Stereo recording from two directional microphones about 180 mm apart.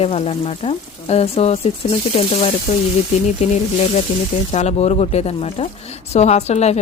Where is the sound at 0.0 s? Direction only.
35° left (ahead or behind).